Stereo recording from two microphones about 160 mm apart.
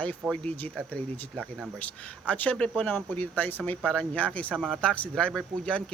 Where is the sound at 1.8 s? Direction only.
10° left (ahead or behind).